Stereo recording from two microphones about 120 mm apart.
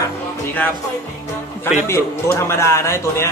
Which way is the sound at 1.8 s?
25° left (ahead or behind).